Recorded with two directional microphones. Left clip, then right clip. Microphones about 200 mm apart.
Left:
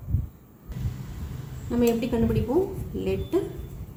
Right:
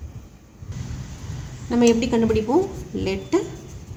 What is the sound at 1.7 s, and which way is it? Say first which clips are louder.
Speech: right 6 dB; 55° right (ahead or behind).